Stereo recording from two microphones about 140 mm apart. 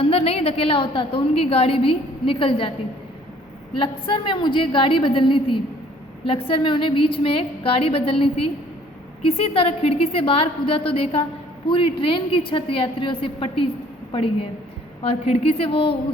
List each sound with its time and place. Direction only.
0.0 s a woman's voice: 45° left (ahead or behind)
3.8 s a woman's voice: 40° left (ahead or behind)